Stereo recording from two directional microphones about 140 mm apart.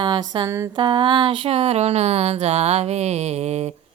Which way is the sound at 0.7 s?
35° right (ahead or behind).